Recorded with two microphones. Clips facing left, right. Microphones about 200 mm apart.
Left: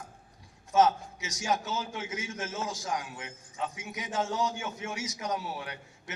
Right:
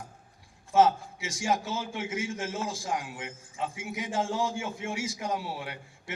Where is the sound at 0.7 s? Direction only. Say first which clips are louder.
Right 2 dB; 30° right (ahead or behind).